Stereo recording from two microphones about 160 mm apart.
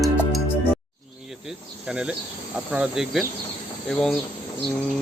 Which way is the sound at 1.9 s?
5° right (ahead or behind).